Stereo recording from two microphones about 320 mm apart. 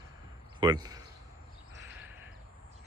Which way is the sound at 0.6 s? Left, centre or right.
Centre.